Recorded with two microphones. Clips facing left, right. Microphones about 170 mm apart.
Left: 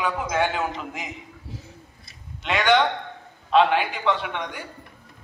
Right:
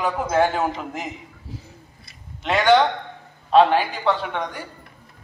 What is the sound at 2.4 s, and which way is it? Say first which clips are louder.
A man's voice: right 3 dB; 40° right (ahead or behind).